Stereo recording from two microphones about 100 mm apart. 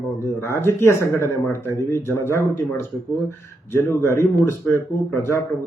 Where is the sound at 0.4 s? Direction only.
25° left (ahead or behind).